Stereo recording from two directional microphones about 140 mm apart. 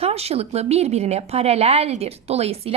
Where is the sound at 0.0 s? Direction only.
45° right (ahead or behind).